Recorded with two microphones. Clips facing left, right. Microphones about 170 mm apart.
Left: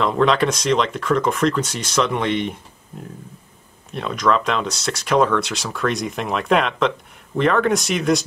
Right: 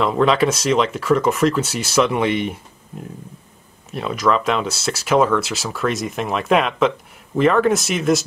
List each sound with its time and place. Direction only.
0.0 s speech: 5° right (ahead or behind)
3.9 s speech: 5° right (ahead or behind)